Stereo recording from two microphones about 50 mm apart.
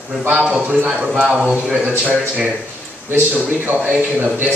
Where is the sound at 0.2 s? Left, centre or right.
Right.